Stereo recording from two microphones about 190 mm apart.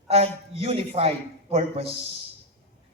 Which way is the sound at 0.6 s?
30° right (ahead or behind).